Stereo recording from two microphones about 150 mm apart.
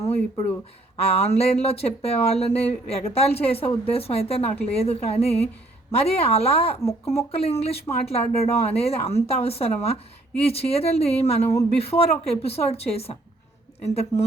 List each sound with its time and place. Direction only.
0.0 s speech: 45° left (ahead or behind)